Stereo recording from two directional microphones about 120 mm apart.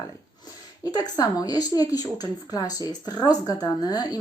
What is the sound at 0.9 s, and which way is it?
A woman's voice, 35° left (ahead or behind).